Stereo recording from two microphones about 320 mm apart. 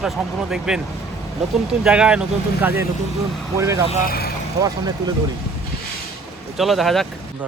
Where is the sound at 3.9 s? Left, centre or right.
Left.